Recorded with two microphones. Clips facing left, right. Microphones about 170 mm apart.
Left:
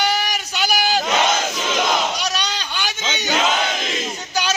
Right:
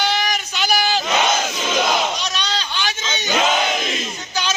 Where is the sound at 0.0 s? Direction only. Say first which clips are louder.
Even; 10° left (ahead or behind).